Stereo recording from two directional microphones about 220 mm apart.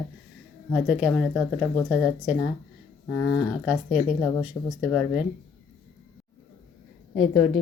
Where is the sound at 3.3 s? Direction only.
Centre (ahead or behind).